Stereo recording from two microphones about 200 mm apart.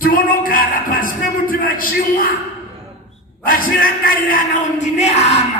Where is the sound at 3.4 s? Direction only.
45° left (ahead or behind).